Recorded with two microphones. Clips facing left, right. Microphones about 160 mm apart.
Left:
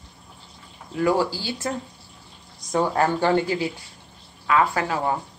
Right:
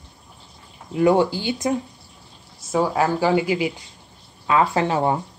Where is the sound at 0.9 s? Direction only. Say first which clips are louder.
Right 4 dB; 20° right (ahead or behind).